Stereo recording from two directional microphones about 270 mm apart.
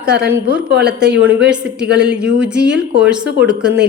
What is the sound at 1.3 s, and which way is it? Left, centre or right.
A woman's voice, centre.